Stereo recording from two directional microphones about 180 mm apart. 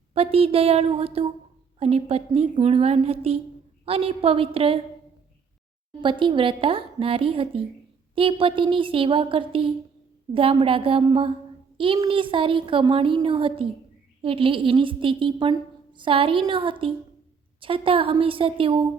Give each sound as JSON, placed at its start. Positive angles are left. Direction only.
{"t": 0.1, "sound": "a woman's voice", "side_deg": -35}
{"t": 6.0, "sound": "a woman's voice", "side_deg": -25}